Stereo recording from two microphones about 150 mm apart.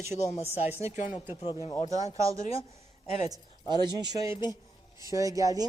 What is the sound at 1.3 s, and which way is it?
Speech, 35° left (ahead or behind).